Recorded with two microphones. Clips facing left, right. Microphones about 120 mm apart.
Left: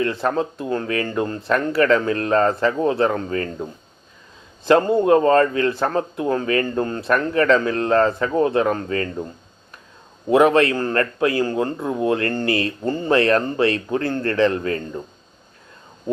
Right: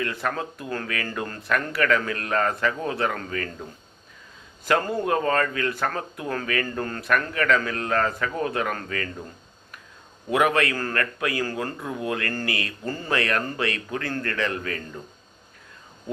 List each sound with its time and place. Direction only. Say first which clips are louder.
0.0 s a man's voice: left 7 dB; 30° left (ahead or behind)
10.2 s a man's voice: left 7 dB; 30° left (ahead or behind)